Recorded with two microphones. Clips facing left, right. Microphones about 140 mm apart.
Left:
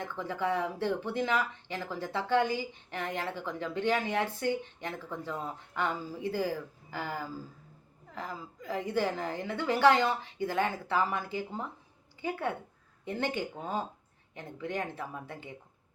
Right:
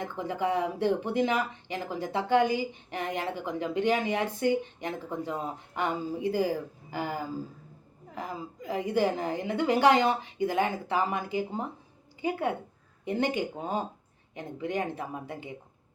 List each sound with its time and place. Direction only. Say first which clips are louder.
0.2 s speech: right 3 dB; 15° right (ahead or behind)